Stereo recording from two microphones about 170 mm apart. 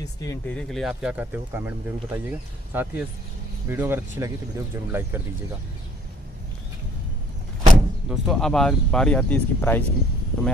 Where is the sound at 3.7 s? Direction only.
10° right (ahead or behind).